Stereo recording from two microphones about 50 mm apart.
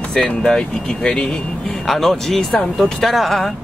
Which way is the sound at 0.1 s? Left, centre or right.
Centre.